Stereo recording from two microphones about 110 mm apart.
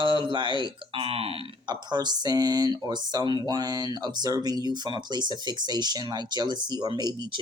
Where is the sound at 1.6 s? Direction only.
40° right (ahead or behind).